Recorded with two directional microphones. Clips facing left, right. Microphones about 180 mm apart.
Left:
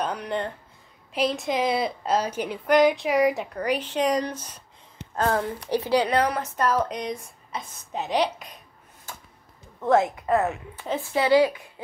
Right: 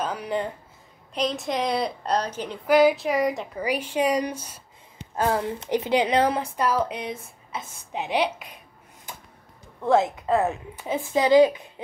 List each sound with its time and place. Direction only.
0.0 s a woman's voice: 5° right (ahead or behind)
2.6 s a woman's voice: 5° right (ahead or behind)
3.6 s a woman's voice: 10° right (ahead or behind)
5.5 s a woman's voice: 20° right (ahead or behind)
9.8 s a woman's voice: 10° right (ahead or behind)